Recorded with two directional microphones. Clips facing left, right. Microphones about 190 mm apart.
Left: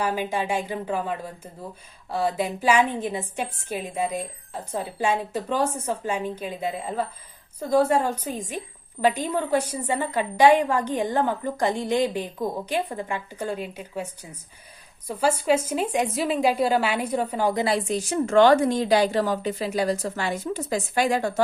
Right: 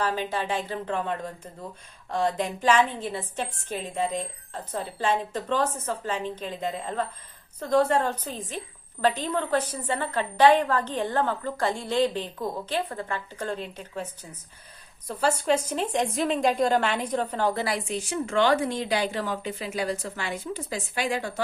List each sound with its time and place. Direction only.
0.0 s a woman's voice: 10° left (ahead or behind)
17.7 s a woman's voice: 35° left (ahead or behind)